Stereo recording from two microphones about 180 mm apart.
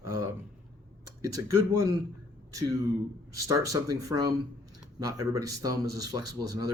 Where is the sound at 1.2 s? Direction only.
20° right (ahead or behind).